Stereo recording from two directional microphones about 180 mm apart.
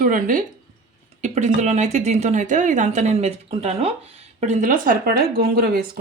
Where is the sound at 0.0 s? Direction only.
50° right (ahead or behind).